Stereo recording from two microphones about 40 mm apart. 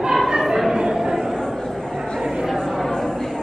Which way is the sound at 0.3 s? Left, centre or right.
Centre.